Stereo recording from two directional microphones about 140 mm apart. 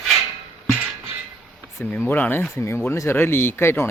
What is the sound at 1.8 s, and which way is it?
Speech, 15° left (ahead or behind).